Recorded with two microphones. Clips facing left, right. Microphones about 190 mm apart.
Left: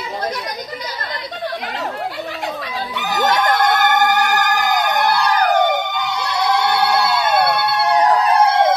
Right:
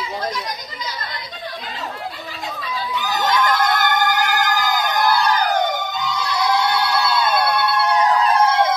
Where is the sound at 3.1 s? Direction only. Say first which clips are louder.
Left 3 dB; 50° left (ahead or behind).